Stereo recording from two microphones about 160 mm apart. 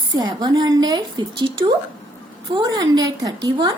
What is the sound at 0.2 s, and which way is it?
A woman's voice, 25° right (ahead or behind).